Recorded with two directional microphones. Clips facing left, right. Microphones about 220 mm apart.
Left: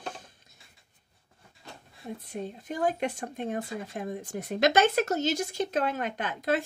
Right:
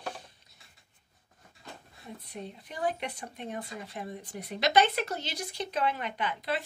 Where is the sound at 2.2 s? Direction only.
45° left (ahead or behind).